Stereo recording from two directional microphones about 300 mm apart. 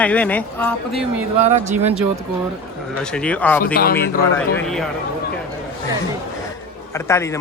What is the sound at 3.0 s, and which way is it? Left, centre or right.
Speech, centre.